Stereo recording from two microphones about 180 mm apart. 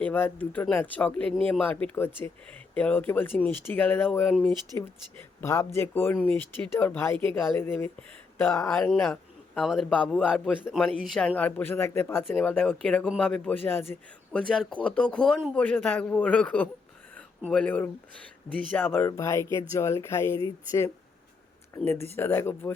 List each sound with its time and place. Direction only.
0.0 s a man's voice: 10° left (ahead or behind)
7.1 s speech: 30° right (ahead or behind)
7.5 s a man's voice: 10° left (ahead or behind)
21.8 s a man's voice: 10° left (ahead or behind)